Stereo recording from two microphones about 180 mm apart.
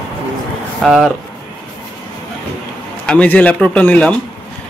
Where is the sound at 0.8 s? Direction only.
Centre (ahead or behind).